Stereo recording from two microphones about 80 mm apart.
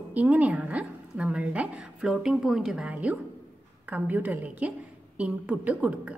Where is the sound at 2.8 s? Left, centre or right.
Centre.